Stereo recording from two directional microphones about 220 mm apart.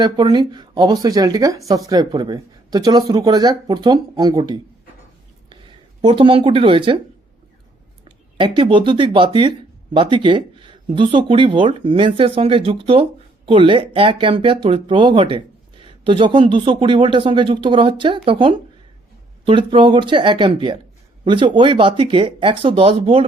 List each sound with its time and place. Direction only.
0.0 s speech: 20° right (ahead or behind)
8.0 s speech: 25° right (ahead or behind)